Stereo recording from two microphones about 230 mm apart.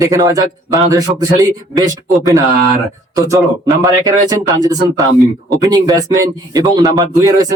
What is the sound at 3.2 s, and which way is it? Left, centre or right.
Speech, centre.